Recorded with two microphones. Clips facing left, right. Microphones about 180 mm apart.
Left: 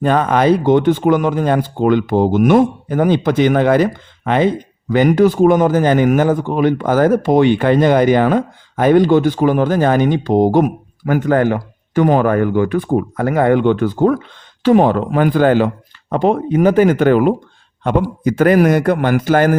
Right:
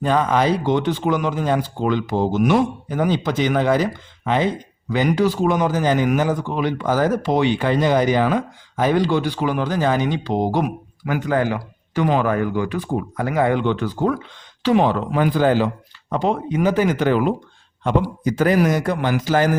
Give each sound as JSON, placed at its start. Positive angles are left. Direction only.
{"t": 0.0, "sound": "a man's voice", "side_deg": 55}